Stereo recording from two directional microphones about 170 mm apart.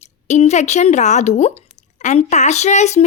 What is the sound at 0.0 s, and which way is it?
Speech, 45° left (ahead or behind).